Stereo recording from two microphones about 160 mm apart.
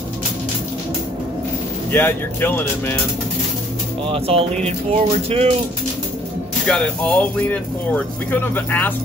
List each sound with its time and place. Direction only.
1.9 s speech: 10° left (ahead or behind)
4.1 s music: 35° right (ahead or behind)
6.6 s speech: 5° left (ahead or behind)